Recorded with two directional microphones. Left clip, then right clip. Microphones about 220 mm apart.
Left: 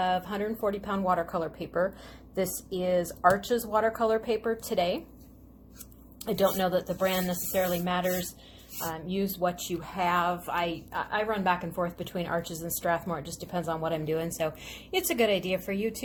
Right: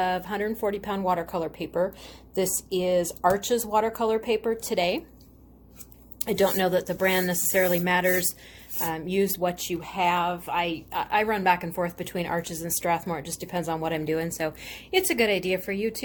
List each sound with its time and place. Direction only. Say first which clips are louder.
0.0 s speech: right 2 dB; 15° right (ahead or behind)
6.2 s a woman's voice: right 3 dB; 25° right (ahead or behind)